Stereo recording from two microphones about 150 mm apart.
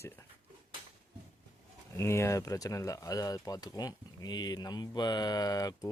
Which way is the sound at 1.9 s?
20° left (ahead or behind).